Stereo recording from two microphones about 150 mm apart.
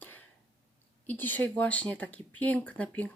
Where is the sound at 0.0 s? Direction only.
10° left (ahead or behind).